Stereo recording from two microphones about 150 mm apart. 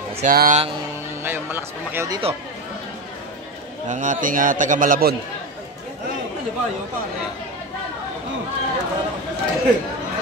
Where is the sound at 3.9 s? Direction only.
55° right (ahead or behind).